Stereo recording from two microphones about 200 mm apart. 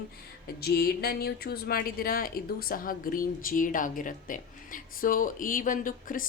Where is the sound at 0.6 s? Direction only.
50° left (ahead or behind).